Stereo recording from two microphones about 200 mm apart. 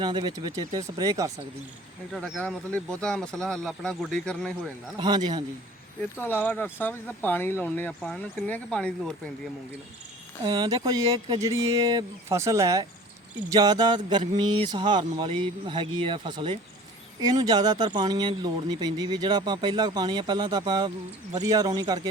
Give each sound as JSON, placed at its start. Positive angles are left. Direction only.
{"t": 0.0, "sound": "speech", "side_deg": -20}
{"t": 2.1, "sound": "speech", "side_deg": 0}
{"t": 4.9, "sound": "speech", "side_deg": -20}
{"t": 6.1, "sound": "speech", "side_deg": 10}
{"t": 10.4, "sound": "speech", "side_deg": -20}